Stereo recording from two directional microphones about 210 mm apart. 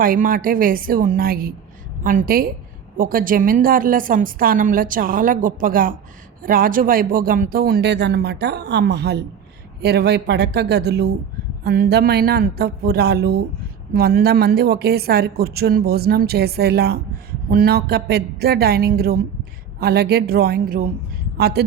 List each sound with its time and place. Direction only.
0.0 s a woman's voice: 40° right (ahead or behind)